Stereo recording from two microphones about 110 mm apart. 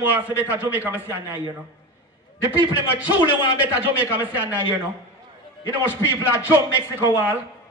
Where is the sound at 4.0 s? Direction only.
15° right (ahead or behind).